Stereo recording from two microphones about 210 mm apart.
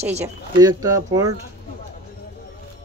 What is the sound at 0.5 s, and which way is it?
Speech, 15° right (ahead or behind).